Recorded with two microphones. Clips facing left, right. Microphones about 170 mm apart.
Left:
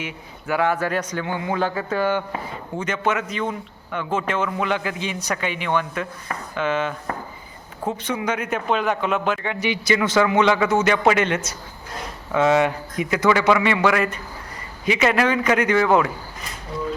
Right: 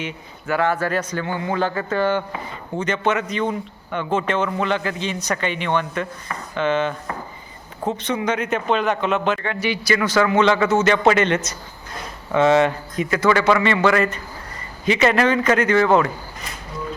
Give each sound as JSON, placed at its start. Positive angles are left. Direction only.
{"t": 0.0, "sound": "a man's voice", "side_deg": 10}